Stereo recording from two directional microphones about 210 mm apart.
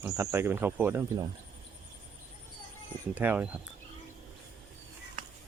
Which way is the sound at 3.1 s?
10° right (ahead or behind).